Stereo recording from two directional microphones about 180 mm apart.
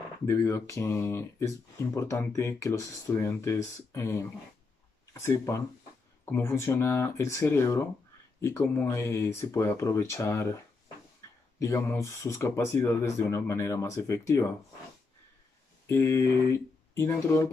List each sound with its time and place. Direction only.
0.3 s speech: 15° left (ahead or behind)
11.6 s speech: 15° left (ahead or behind)
15.9 s speech: 15° left (ahead or behind)